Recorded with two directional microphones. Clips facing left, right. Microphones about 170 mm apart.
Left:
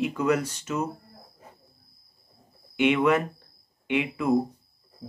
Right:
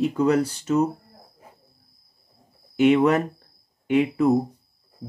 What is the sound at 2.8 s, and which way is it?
Speech, 40° right (ahead or behind).